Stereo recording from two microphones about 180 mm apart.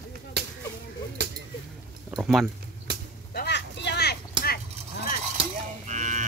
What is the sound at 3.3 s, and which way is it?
Vehicle, 65° left (ahead or behind).